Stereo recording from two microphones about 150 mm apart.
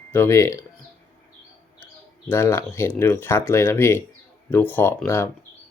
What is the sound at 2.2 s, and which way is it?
Speech, 15° left (ahead or behind).